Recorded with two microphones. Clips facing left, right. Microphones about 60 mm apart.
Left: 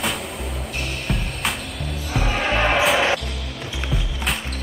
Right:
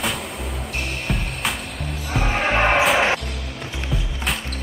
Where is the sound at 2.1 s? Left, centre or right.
Right.